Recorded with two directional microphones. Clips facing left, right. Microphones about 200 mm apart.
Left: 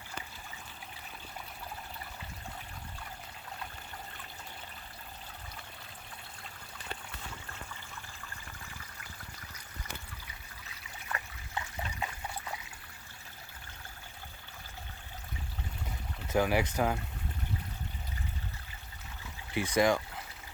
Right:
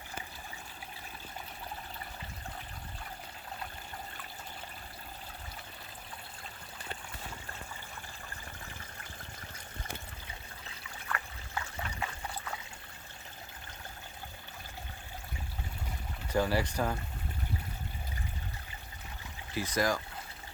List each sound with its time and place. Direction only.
11.1 s trickle: 20° left (ahead or behind)
16.3 s speech: 15° left (ahead or behind)
19.5 s speech: 20° left (ahead or behind)